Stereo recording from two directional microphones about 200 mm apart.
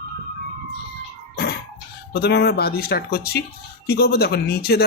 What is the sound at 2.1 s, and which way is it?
Speech, 55° left (ahead or behind).